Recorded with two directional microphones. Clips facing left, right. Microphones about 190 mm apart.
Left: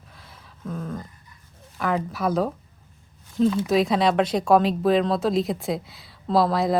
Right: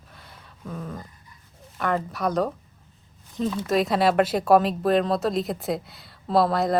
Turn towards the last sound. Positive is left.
turn(degrees=0)  # may be behind; listen again after turning